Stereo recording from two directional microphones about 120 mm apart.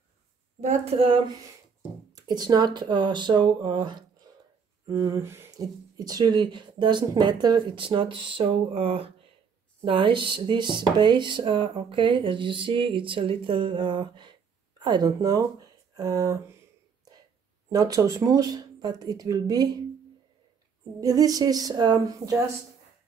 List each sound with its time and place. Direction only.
0.6 s a woman's voice: 65° right (ahead or behind)
2.1 s speech: 35° right (ahead or behind)
4.8 s a sound: 25° right (ahead or behind)
5.9 s speech: 35° right (ahead or behind)
17.6 s speech: 30° right (ahead or behind)
21.0 s speech: 30° right (ahead or behind)